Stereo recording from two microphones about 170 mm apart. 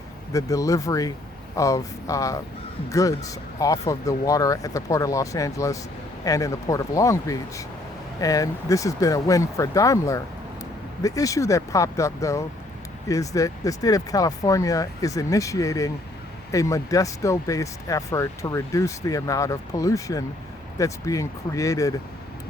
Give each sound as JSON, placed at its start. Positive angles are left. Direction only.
{"t": 0.3, "sound": "speech", "side_deg": 20}